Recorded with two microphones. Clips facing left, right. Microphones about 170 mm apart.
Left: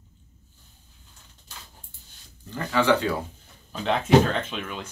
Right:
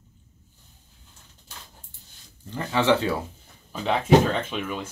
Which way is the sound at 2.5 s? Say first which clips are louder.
Even; 25° right (ahead or behind).